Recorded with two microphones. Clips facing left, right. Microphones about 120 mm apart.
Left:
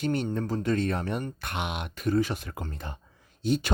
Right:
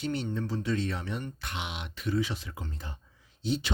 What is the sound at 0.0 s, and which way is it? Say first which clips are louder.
Speech: left 4 dB; 50° left (ahead or behind).